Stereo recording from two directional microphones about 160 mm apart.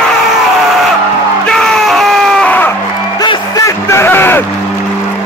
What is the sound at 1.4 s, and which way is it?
Screaming, 5° left (ahead or behind).